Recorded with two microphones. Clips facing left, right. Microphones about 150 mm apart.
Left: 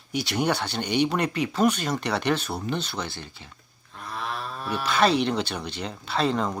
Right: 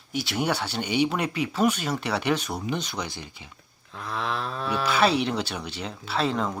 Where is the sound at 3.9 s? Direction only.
90° right.